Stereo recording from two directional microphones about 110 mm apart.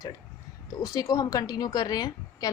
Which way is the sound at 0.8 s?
35° left (ahead or behind).